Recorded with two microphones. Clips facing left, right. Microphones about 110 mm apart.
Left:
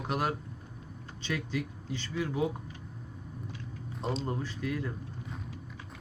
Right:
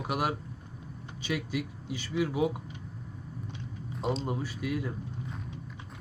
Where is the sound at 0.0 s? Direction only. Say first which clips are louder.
Right 1 dB; 10° right (ahead or behind).